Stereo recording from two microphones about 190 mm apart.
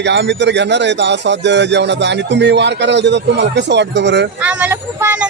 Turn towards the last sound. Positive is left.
turn(degrees=-10)  # may be behind; listen again after turning